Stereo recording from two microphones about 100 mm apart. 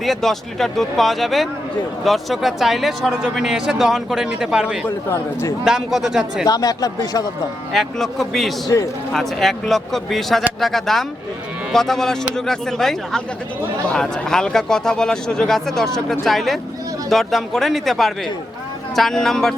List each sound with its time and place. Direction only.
0.0 s a man's voice: centre (ahead or behind)
5.1 s a man's voice: 30° left (ahead or behind)
5.6 s speech: 5° right (ahead or behind)
6.4 s speech: 40° left (ahead or behind)
7.7 s speech: centre (ahead or behind)
8.6 s speech: 35° left (ahead or behind)
9.1 s speech: 5° left (ahead or behind)